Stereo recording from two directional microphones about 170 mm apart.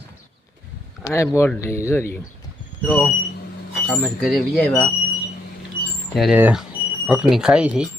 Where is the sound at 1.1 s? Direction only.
15° left (ahead or behind).